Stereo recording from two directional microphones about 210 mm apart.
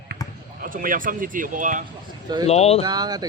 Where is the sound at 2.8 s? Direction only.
20° right (ahead or behind).